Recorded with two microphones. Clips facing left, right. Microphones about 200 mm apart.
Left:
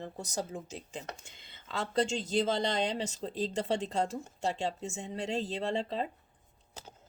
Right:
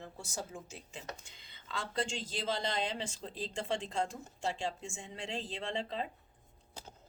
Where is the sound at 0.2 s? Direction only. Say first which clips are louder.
Left 5 dB; 40° left (ahead or behind).